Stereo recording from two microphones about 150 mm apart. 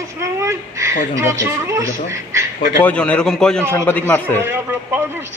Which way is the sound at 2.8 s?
10° left (ahead or behind).